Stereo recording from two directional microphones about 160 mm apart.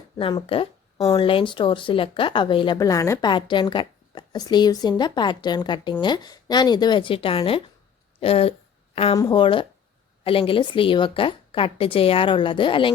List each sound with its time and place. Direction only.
0.2 s a woman's voice: 35° left (ahead or behind)